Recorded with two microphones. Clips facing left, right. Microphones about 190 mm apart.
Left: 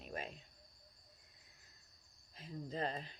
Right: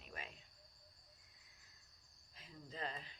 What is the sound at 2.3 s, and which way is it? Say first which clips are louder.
Speech: left 9 dB; 40° left (ahead or behind).